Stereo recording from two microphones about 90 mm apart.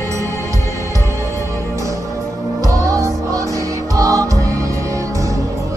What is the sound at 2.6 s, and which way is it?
Music, 40° right (ahead or behind).